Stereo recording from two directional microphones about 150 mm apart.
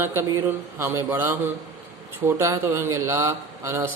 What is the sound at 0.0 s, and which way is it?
A man's voice, 15° right (ahead or behind).